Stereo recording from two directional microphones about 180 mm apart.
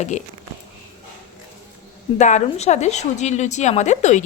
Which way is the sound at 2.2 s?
40° left (ahead or behind).